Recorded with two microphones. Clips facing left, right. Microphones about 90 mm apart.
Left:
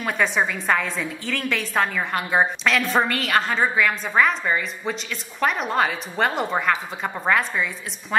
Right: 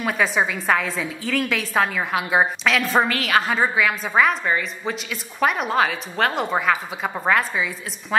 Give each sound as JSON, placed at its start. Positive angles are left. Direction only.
{"t": 0.0, "sound": "a woman's voice", "side_deg": 0}